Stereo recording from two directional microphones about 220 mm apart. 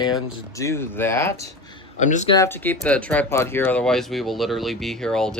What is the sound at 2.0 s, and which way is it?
Speech, 35° left (ahead or behind).